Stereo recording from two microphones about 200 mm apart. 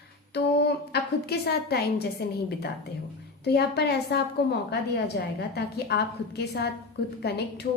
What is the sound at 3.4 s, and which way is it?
A woman's voice, 55° left (ahead or behind).